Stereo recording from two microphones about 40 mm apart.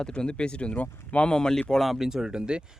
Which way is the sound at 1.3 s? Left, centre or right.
Centre.